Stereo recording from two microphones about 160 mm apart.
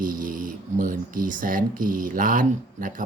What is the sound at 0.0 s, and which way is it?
Speech, 60° right (ahead or behind).